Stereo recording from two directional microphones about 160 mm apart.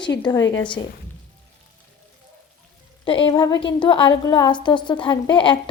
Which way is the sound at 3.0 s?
30° left (ahead or behind).